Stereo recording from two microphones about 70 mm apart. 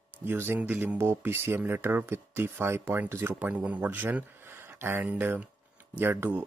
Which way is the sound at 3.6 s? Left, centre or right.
Right.